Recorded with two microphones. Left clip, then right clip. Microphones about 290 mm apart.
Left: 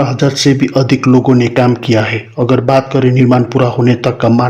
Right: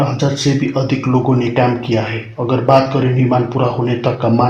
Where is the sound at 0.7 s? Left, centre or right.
Left.